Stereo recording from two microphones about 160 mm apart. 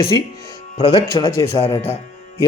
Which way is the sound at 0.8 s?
40° left (ahead or behind).